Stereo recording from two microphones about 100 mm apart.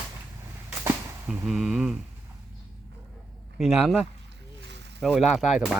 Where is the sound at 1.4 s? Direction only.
5° right (ahead or behind).